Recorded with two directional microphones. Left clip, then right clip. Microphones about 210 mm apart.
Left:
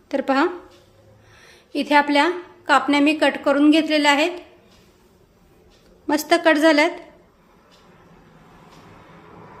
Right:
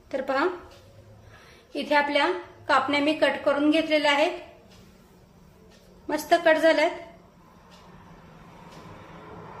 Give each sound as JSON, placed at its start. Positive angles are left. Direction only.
{"t": 0.1, "sound": "a woman's voice", "side_deg": 50}
{"t": 1.7, "sound": "a woman's voice", "side_deg": 55}
{"t": 6.0, "sound": "a woman's voice", "side_deg": 55}